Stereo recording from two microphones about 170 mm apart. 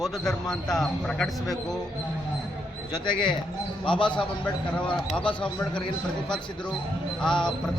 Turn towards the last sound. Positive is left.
turn(degrees=5)  # may be behind; listen again after turning